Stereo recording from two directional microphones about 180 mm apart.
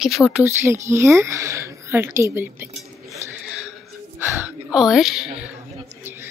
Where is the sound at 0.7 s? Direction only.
15° right (ahead or behind).